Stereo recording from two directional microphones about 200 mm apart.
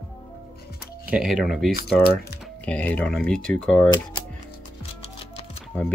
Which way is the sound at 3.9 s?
20° left (ahead or behind).